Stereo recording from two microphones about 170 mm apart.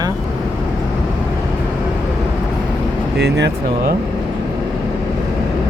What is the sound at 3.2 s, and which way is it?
Speech, 85° right.